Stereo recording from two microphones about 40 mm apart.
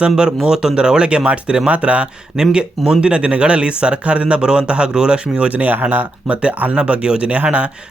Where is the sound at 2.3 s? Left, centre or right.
Centre.